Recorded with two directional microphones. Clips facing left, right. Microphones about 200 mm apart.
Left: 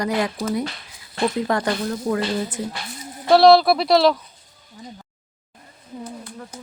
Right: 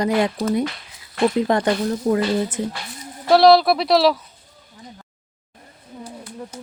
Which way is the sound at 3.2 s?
Centre (ahead or behind).